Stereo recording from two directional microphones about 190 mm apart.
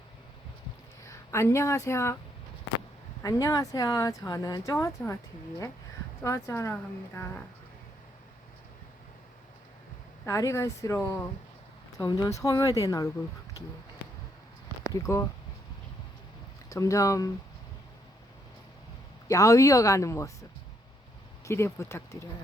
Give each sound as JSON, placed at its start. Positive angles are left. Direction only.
{"t": 1.0, "sound": "a woman's voice", "side_deg": 15}
{"t": 3.2, "sound": "speech", "side_deg": 20}
{"t": 6.2, "sound": "speech", "side_deg": 15}
{"t": 10.2, "sound": "speech", "side_deg": 15}
{"t": 14.9, "sound": "speech", "side_deg": 15}
{"t": 16.6, "sound": "speech", "side_deg": 15}
{"t": 19.3, "sound": "speech", "side_deg": 15}
{"t": 21.4, "sound": "speech", "side_deg": 15}